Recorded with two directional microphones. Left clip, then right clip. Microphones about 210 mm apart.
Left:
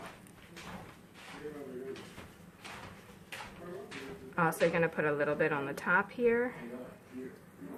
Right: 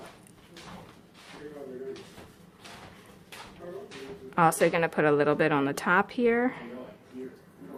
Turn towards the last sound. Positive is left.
turn(degrees=-55)  # may be behind; listen again after turning